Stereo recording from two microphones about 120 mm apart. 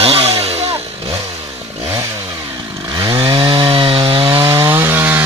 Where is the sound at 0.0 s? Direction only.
55° right (ahead or behind).